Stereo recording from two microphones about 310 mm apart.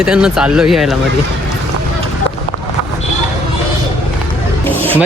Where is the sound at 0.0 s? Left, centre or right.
Centre.